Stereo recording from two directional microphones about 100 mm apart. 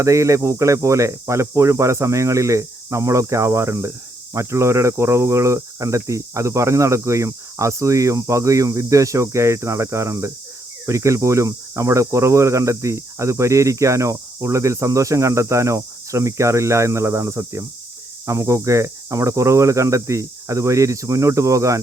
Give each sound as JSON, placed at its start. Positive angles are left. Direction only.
{"t": 0.0, "sound": "speech", "side_deg": -30}